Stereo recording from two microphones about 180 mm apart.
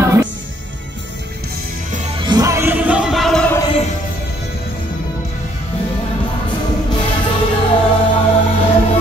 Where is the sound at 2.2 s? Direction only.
20° right (ahead or behind); by 3.4 s centre (ahead or behind).